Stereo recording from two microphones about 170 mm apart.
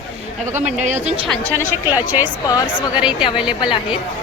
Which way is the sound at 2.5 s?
20° left (ahead or behind).